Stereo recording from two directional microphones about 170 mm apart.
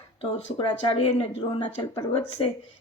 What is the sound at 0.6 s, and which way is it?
A man's voice, 35° left (ahead or behind).